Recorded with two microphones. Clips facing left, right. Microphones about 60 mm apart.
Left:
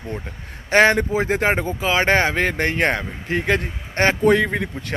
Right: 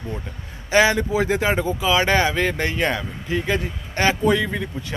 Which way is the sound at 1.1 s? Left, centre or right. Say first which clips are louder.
Left 1 dB; left.